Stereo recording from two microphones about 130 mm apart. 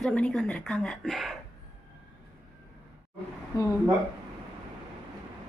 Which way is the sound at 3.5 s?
30° left (ahead or behind).